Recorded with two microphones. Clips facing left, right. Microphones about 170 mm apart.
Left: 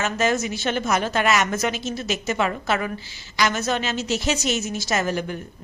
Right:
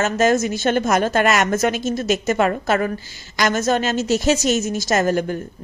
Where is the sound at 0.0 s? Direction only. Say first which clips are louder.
Right 5 dB; 45° right (ahead or behind).